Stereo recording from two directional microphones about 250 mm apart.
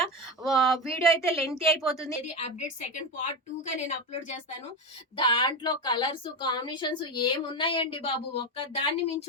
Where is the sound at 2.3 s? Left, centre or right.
Left.